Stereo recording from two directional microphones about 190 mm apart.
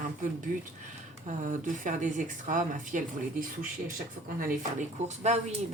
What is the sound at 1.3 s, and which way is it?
Speech, 40° right (ahead or behind).